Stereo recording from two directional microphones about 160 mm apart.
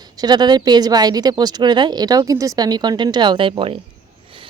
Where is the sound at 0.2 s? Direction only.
25° right (ahead or behind).